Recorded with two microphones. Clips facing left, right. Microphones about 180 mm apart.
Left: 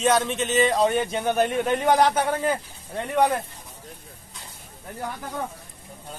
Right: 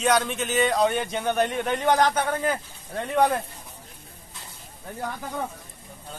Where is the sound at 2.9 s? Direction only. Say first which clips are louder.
Even; 10° left (ahead or behind).